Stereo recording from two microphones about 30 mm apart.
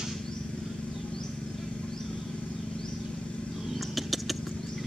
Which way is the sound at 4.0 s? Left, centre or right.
Centre.